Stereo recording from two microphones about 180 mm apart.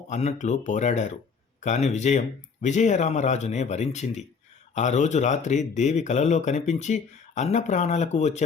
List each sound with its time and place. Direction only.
0.1 s speech: 40° left (ahead or behind)